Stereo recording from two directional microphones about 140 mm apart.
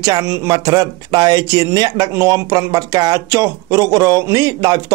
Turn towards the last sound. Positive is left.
turn(degrees=-25)  # may be behind; listen again after turning